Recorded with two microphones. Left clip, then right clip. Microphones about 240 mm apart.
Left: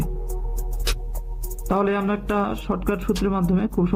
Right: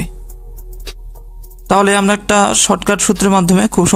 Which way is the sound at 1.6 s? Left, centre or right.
Right.